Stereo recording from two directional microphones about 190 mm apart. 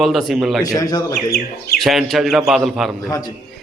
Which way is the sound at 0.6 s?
20° left (ahead or behind).